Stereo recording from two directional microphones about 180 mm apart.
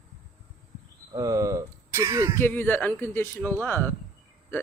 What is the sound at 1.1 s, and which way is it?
Speech, 20° right (ahead or behind).